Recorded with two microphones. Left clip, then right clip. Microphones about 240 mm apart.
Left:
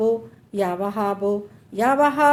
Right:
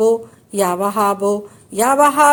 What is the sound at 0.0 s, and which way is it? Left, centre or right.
Speech, right.